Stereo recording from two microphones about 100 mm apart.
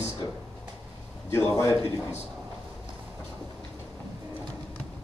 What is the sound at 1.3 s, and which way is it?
Speech, 30° left (ahead or behind).